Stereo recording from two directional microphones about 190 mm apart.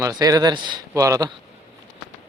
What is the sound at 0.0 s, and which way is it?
Speech, 20° right (ahead or behind).